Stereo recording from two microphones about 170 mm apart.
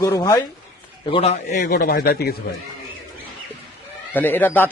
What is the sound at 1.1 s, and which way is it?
Speech, 35° left (ahead or behind).